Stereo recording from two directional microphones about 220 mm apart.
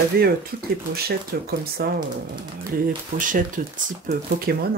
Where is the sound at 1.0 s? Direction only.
45° right (ahead or behind).